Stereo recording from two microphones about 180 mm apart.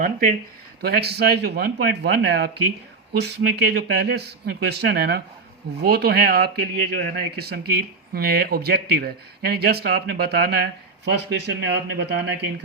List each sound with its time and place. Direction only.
0.0 s speech: 45° right (ahead or behind)
0.8 s speech: 60° right (ahead or behind)